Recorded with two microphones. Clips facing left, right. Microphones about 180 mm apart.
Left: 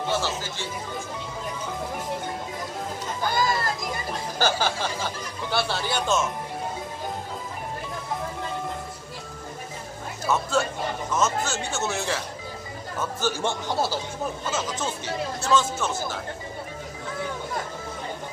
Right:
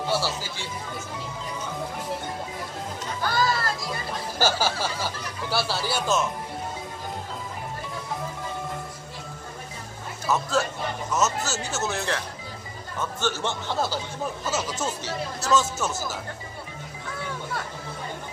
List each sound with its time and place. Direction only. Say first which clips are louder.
0.1 s speech: right 1 dB; 10° right (ahead or behind)
3.3 s children playing: even; 15° left (ahead or behind)
4.4 s speech: even; 5° right (ahead or behind)
10.3 s speech: even; centre (ahead or behind)
13.0 s speech: left 1 dB; 10° left (ahead or behind)
14.4 s speech: right 2 dB; 5° right (ahead or behind)